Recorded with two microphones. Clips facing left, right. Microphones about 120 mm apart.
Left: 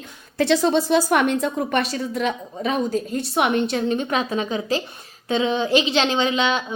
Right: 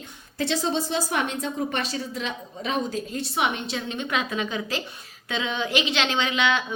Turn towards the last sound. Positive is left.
turn(degrees=30)  # may be behind; listen again after turning